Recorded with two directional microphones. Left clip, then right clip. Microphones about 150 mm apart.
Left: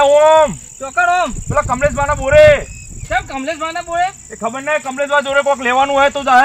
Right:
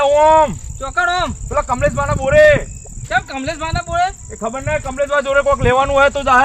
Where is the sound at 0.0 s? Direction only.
40° right (ahead or behind).